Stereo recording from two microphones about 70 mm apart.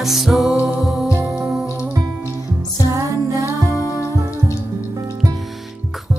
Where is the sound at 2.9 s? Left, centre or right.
Right.